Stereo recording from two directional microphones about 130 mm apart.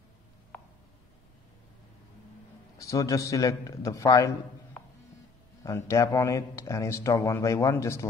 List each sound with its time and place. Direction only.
2.8 s speech: 25° left (ahead or behind)
5.6 s speech: 25° left (ahead or behind)